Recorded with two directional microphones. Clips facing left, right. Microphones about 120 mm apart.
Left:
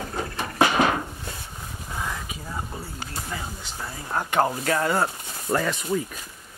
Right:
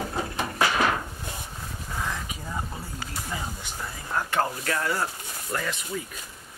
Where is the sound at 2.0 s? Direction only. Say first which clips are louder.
Even; 5° left (ahead or behind).